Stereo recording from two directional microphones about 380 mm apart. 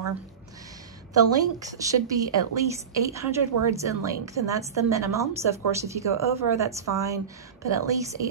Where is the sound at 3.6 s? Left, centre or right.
Right.